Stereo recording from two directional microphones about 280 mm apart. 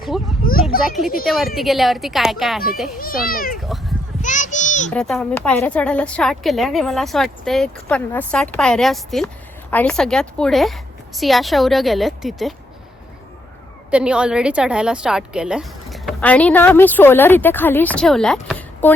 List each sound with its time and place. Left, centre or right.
0.1 s a sound: centre
0.8 s speech: centre
3.0 s a child's voice: left
3.6 s speech: centre
4.2 s a sound: left
4.9 s speech: centre
13.9 s speech: centre